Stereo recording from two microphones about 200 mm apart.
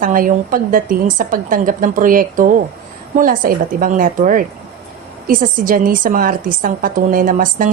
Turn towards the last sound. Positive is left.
turn(degrees=-45)  # may be behind; listen again after turning